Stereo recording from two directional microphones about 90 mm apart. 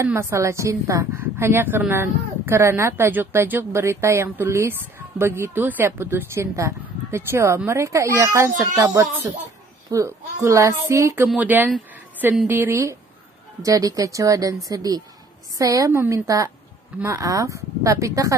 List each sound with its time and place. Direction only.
0.0 s a woman's voice: 30° right (ahead or behind)
11.3 s a woman's voice: 20° right (ahead or behind)
13.6 s speech: 40° right (ahead or behind)